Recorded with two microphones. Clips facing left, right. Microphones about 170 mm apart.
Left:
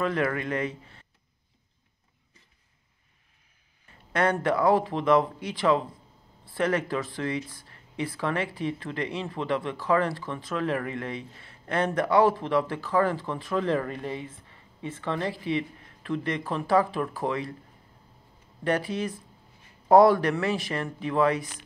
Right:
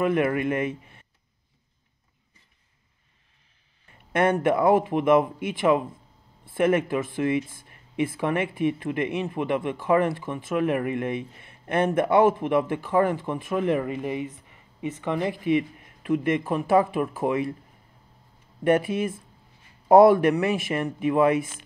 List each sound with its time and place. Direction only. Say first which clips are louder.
0.0 s speech: right 4 dB; 20° right (ahead or behind)
4.1 s speech: right 3 dB; 20° right (ahead or behind)
18.6 s speech: right 5 dB; 10° right (ahead or behind)
19.9 s speech: right 3 dB; 20° right (ahead or behind)
21.3 s speech: right 4 dB; 25° right (ahead or behind)